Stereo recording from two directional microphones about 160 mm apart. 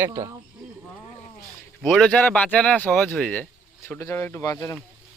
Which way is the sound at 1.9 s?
5° left (ahead or behind).